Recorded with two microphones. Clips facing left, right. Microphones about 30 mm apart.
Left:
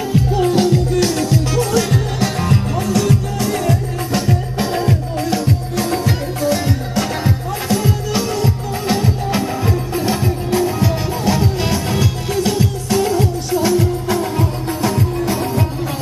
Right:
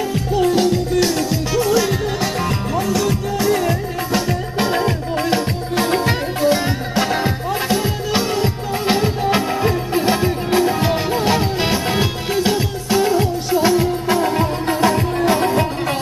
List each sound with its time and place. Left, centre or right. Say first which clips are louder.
0.1 s music: left 3 dB; centre
5.2 s music: right 1 dB; right
14.8 s music: right 2 dB; right